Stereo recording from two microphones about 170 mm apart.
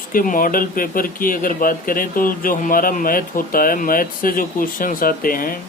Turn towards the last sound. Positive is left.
turn(degrees=55)  # may be behind; listen again after turning